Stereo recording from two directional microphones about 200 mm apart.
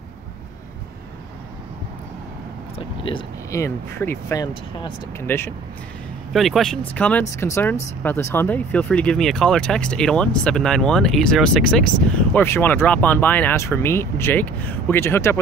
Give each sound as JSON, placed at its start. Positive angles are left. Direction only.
{"t": 2.8, "sound": "speech", "side_deg": 25}
{"t": 3.5, "sound": "speech", "side_deg": 15}
{"t": 6.3, "sound": "speech", "side_deg": 0}